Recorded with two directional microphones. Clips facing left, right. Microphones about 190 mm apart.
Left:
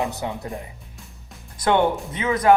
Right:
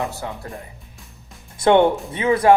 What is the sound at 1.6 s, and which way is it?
Speech, 30° right (ahead or behind).